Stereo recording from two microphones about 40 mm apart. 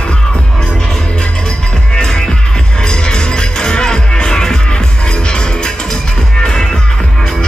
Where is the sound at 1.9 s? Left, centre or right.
Centre.